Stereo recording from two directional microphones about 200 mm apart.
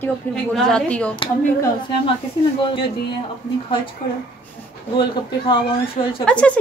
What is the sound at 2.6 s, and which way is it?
Speech, 25° left (ahead or behind).